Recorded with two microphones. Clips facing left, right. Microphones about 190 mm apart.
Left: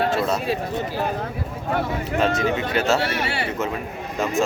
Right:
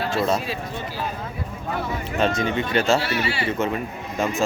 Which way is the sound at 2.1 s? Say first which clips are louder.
Left 1 dB; 5° left (ahead or behind).